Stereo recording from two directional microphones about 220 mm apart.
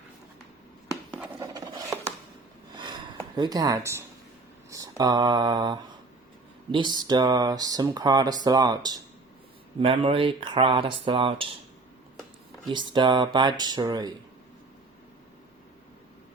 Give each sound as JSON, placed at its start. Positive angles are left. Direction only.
{"t": 1.1, "sound": "pant", "side_deg": -10}
{"t": 2.7, "sound": "a sound", "side_deg": -20}
{"t": 4.7, "sound": "speech", "side_deg": -15}
{"t": 12.6, "sound": "speech", "side_deg": -20}